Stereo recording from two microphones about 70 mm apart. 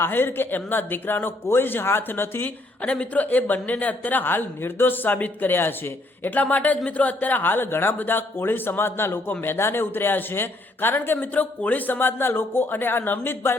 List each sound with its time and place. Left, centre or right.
0.0 s a man's voice: left
2.8 s a woman's voice: centre